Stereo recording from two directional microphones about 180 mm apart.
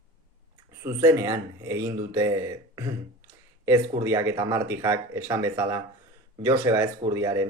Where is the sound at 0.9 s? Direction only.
15° right (ahead or behind).